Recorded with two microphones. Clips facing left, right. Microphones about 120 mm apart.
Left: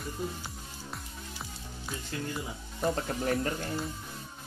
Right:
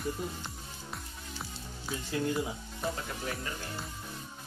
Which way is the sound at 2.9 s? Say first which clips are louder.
Left 10 dB; 45° left (ahead or behind).